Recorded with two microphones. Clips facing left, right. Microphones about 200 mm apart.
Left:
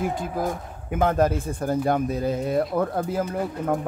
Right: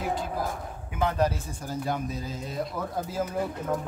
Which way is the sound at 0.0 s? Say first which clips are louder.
Left 4 dB; 50° left (ahead or behind).